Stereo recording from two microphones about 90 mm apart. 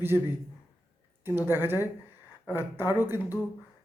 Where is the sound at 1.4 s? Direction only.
25° right (ahead or behind).